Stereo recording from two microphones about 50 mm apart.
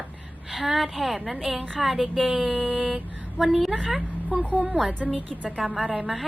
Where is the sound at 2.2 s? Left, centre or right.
Centre.